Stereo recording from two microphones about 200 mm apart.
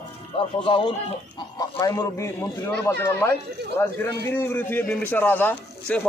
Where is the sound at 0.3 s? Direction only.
25° left (ahead or behind).